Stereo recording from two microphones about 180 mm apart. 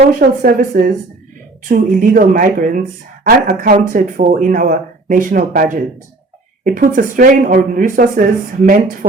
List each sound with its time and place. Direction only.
0.1 s speech: 50° right (ahead or behind)